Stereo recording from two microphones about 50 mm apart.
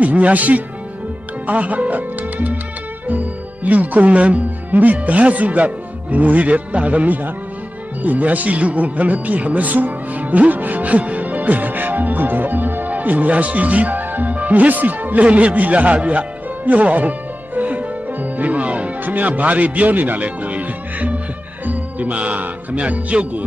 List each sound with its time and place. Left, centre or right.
0.0 s speech: right